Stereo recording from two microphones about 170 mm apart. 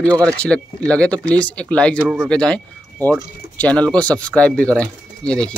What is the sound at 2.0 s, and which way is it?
Speech, 10° right (ahead or behind).